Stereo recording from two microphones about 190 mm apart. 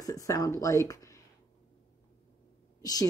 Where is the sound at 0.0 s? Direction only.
20° left (ahead or behind).